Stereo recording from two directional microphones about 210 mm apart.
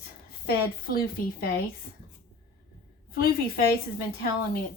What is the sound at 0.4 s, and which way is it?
A woman's voice, 45° left (ahead or behind).